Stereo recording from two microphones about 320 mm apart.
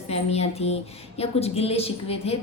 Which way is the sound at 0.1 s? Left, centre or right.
Centre.